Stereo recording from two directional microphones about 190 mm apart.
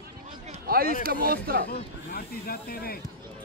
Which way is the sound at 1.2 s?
50° right (ahead or behind).